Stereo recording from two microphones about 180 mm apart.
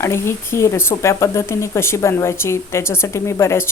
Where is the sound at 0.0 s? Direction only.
15° left (ahead or behind).